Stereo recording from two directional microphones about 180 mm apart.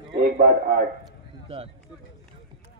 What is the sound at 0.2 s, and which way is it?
Speech, 55° right (ahead or behind).